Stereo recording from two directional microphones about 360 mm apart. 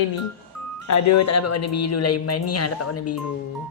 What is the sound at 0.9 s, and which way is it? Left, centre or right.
Speech, left.